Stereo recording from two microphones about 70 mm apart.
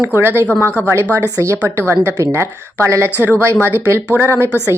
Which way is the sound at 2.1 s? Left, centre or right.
Right.